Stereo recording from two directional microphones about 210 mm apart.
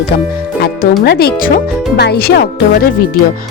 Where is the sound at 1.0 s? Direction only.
50° left (ahead or behind).